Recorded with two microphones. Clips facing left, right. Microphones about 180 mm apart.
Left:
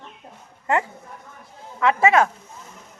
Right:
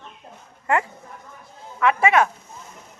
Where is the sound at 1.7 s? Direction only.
30° left (ahead or behind).